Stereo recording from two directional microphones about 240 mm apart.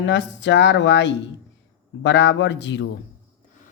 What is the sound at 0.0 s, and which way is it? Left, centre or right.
A man's voice, left.